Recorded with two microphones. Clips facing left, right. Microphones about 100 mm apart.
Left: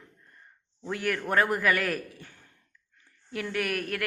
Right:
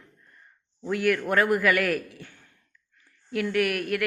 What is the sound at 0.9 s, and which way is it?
A man's voice, 30° left (ahead or behind).